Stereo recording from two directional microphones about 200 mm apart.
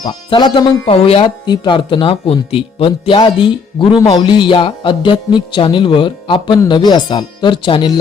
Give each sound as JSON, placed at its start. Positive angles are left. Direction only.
{"t": 0.0, "sound": "speech", "side_deg": 25}